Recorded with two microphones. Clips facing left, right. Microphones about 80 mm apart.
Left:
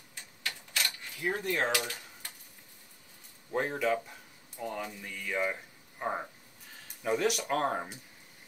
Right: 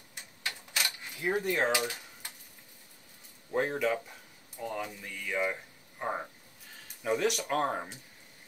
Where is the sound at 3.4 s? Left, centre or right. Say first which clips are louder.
Even; centre.